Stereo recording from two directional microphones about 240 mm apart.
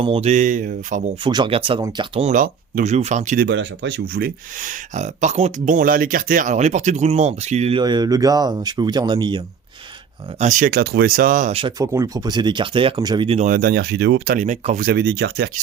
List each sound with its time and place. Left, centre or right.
0.0 s speech: right
1.2 s speech: centre
10.4 s speech: right
14.3 s speech: right
14.8 s speech: right